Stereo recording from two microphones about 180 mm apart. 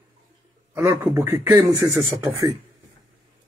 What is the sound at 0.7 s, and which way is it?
Speech, 15° right (ahead or behind).